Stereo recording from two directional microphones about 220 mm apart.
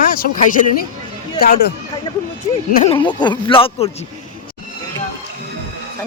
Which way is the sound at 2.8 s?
20° left (ahead or behind).